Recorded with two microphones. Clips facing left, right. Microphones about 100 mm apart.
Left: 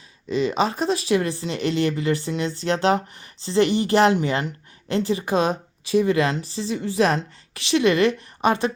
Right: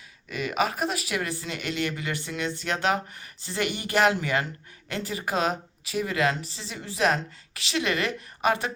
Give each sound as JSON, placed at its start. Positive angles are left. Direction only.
{"t": 0.3, "sound": "speech", "side_deg": 25}